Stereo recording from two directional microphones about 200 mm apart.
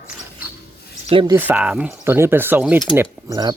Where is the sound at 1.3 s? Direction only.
10° right (ahead or behind).